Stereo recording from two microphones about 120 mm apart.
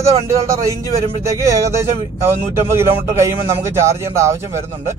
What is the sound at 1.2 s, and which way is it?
Speech, 25° right (ahead or behind).